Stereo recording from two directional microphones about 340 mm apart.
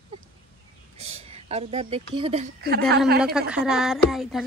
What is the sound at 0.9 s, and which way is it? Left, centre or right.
Speech, centre.